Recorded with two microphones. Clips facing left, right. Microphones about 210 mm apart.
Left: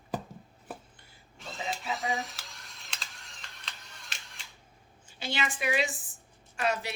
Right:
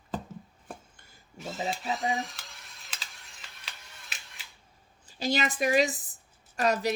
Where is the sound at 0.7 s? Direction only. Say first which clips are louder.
Left 1 dB; 5° left (ahead or behind).